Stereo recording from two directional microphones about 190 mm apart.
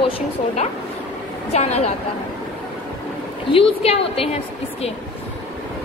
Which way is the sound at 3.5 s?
30° left (ahead or behind).